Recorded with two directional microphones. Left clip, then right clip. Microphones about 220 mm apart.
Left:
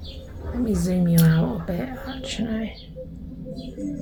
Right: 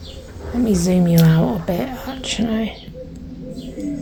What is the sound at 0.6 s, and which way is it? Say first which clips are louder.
A woman's voice: right 7 dB; 25° right (ahead or behind).